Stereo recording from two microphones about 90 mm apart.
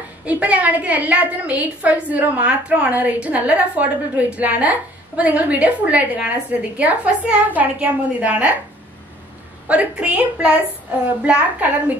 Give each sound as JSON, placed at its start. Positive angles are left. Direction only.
{"t": 0.2, "sound": "a woman's voice", "side_deg": -15}
{"t": 9.7, "sound": "a woman's voice", "side_deg": -15}